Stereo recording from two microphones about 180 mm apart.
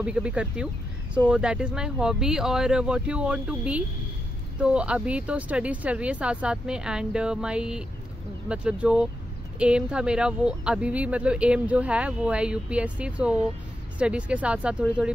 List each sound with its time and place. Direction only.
0.0 s speech: 5° right (ahead or behind)